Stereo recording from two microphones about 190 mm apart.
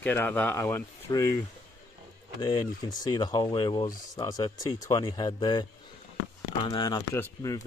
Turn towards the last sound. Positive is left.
turn(degrees=15)  # may be behind; listen again after turning